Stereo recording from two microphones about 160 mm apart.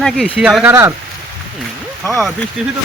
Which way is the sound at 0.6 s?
15° right (ahead or behind).